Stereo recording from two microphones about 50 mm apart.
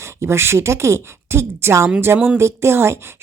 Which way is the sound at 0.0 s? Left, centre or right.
Right.